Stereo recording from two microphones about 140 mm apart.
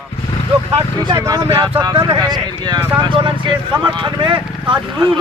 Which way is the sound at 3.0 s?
35° right (ahead or behind).